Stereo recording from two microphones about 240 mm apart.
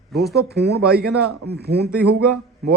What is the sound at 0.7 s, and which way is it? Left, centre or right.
Speech, right.